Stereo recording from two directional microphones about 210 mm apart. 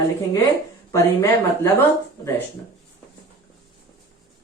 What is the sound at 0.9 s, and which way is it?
Speech, 15° left (ahead or behind).